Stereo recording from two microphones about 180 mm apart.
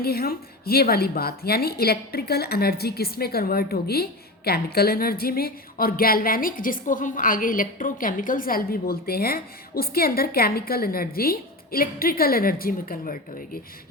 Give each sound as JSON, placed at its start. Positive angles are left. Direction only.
{"t": 0.0, "sound": "a woman's voice", "side_deg": 55}